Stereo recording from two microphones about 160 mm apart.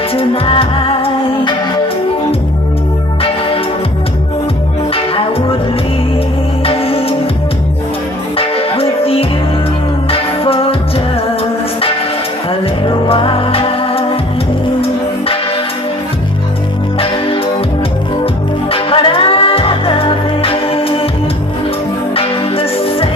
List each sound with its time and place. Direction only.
0.1 s music: 35° left (ahead or behind)
4.9 s music: 35° left (ahead or behind)
6.6 s music: 35° left (ahead or behind)
8.4 s music: 35° left (ahead or behind)
12.8 s music: 30° left (ahead or behind)
18.2 s music: 35° left (ahead or behind)
22.1 s music: 35° left (ahead or behind)